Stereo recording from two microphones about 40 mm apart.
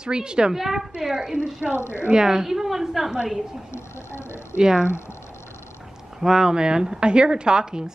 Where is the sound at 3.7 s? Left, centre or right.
Left.